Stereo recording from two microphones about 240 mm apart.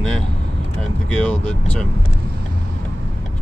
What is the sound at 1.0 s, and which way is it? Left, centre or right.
Speech, centre.